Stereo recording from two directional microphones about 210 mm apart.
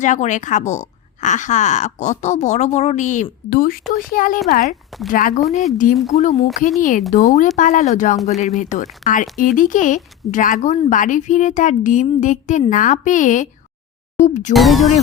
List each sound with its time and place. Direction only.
0.0 s speech: 35° left (ahead or behind)
4.9 s a woman's voice: centre (ahead or behind)
5.7 s speech: 40° left (ahead or behind)
14.5 s a woman's voice: centre (ahead or behind)